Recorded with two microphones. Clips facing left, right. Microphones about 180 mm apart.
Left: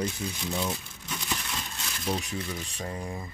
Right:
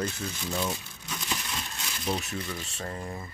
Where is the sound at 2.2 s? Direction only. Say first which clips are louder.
Left 1 dB; 15° left (ahead or behind).